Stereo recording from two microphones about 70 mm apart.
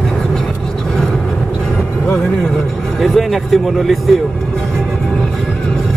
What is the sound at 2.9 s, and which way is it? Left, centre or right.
Speech, centre.